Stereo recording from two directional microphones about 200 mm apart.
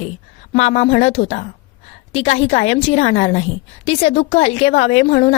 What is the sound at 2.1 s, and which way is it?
A woman's voice, 35° left (ahead or behind).